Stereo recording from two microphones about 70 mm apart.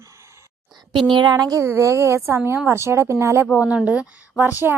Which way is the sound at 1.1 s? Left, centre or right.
Right.